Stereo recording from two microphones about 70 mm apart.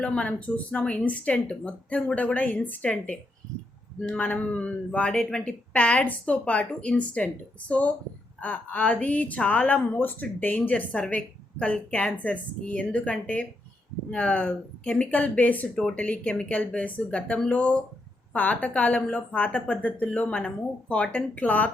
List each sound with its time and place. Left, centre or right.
0.0 s a woman's voice: centre
5.7 s a woman's voice: centre